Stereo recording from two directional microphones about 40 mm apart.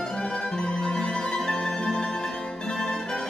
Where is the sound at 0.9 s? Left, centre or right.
Centre.